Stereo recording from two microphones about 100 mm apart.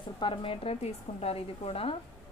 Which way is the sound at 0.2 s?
60° left (ahead or behind).